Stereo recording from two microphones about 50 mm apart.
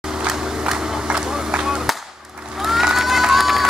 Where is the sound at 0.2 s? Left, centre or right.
Centre.